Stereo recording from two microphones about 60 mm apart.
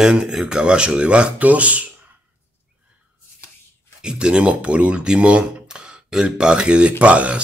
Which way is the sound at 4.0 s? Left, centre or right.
Centre.